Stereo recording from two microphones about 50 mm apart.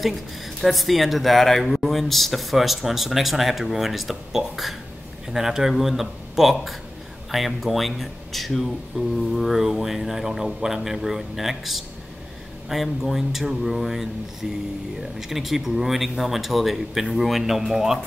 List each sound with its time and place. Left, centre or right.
0.6 s speech: centre